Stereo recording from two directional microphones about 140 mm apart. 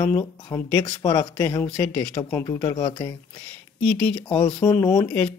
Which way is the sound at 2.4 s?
25° left (ahead or behind).